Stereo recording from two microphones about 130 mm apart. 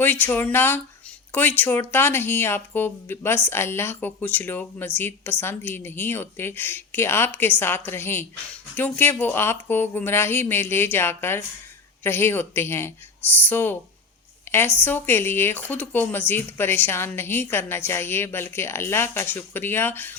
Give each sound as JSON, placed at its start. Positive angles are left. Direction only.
{"t": 0.0, "sound": "speech", "side_deg": 15}